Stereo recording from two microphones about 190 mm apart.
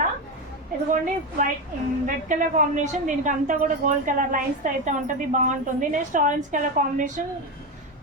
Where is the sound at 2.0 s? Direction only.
40° right (ahead or behind).